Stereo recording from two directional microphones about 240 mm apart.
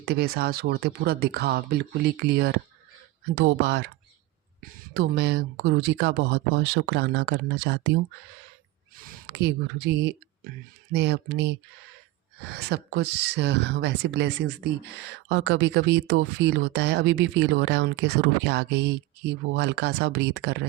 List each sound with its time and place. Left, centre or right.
0.0 s speech: right
4.9 s speech: right
9.2 s speech: right